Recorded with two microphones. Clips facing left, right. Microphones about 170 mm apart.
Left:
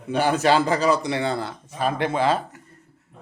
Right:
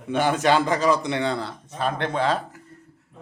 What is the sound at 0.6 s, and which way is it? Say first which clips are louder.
A man's voice: left 1 dB; 10° left (ahead or behind).